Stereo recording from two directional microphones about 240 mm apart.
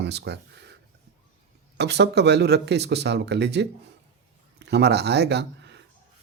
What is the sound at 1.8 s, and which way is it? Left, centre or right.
Speech, right.